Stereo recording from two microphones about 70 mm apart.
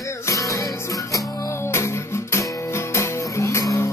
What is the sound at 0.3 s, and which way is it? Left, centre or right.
Music, left.